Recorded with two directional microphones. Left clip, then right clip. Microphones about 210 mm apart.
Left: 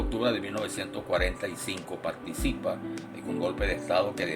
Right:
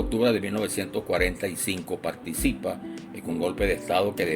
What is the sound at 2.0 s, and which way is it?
Speech, 45° right (ahead or behind).